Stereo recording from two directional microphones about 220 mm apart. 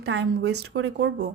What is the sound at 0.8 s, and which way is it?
Speech, 50° right (ahead or behind).